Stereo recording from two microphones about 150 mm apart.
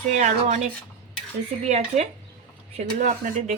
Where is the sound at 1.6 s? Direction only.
50° right (ahead or behind).